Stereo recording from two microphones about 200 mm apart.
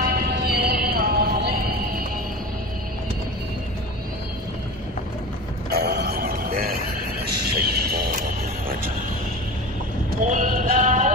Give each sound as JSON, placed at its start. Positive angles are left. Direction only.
{"t": 0.0, "sound": "music", "side_deg": -50}
{"t": 5.7, "sound": "music", "side_deg": -55}
{"t": 10.2, "sound": "clip-clop", "side_deg": -40}